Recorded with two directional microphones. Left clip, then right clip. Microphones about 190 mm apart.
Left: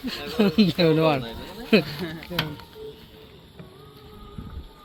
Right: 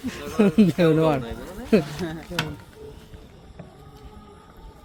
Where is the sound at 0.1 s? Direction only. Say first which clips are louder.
Right 2 dB; 20° right (ahead or behind).